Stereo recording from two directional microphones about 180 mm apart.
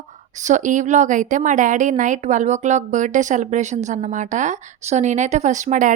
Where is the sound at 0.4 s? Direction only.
45° right (ahead or behind).